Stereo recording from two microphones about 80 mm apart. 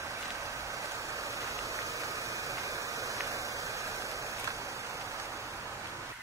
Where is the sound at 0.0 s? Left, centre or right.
Right.